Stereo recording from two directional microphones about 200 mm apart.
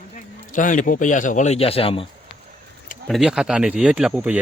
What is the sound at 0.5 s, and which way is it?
A man's voice, 40° left (ahead or behind).